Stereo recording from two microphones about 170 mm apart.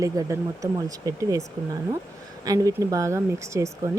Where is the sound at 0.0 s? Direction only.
20° right (ahead or behind).